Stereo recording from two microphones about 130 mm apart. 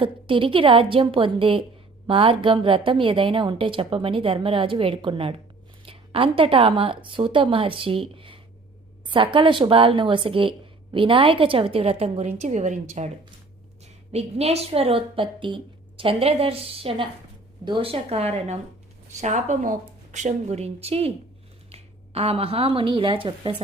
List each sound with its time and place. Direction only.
0.0 s a woman's voice: 40° right (ahead or behind); by 12.8 s 65° right (ahead or behind)
13.8 s a woman's voice: 55° right (ahead or behind)
19.2 s a woman's voice: 65° right (ahead or behind); by 23.6 s 40° right (ahead or behind)